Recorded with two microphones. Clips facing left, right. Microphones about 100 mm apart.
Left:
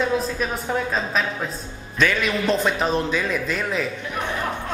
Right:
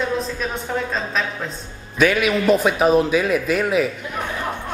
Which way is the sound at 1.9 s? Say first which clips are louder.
Right 4 dB; 10° right (ahead or behind).